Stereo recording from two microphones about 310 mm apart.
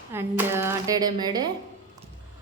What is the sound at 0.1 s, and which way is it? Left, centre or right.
A woman's voice, centre.